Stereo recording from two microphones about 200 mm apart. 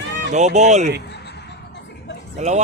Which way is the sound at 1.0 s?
55° left (ahead or behind).